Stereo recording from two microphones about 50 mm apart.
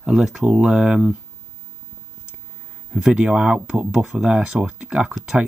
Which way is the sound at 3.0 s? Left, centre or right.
Centre.